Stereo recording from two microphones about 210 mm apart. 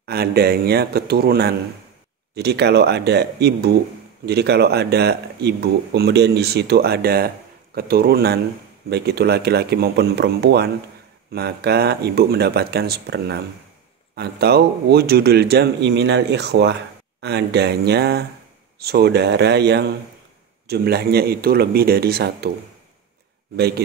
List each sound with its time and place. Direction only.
0.0 s speech: 50° right (ahead or behind)